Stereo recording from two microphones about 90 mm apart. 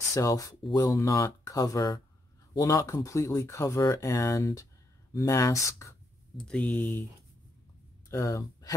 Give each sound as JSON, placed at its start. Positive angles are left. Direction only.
{"t": 0.1, "sound": "speech", "side_deg": 35}
{"t": 6.3, "sound": "speech", "side_deg": 10}
{"t": 8.1, "sound": "speech", "side_deg": 35}